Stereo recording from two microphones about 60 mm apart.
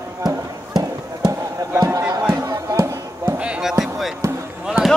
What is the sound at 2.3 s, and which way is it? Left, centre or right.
Music, right.